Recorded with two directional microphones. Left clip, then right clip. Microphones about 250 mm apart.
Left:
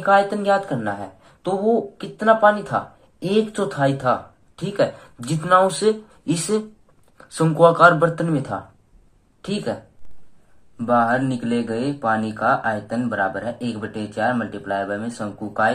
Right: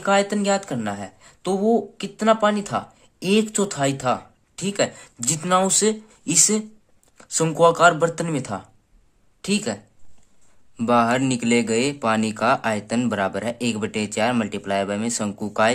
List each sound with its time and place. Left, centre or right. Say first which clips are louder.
0.0 s speech: left 3 dB; right
10.8 s speech: left 1 dB; right